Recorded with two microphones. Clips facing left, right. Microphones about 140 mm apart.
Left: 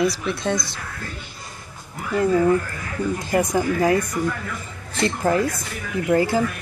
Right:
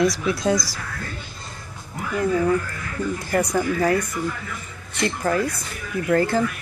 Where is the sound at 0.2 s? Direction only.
Centre (ahead or behind).